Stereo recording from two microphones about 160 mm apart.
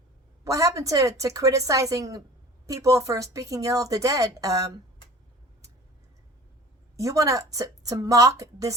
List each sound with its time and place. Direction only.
0.4 s speech: 20° right (ahead or behind)
6.9 s speech: 20° right (ahead or behind)